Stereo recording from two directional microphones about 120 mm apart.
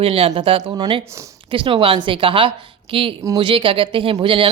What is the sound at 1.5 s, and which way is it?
A man's voice, 45° right (ahead or behind).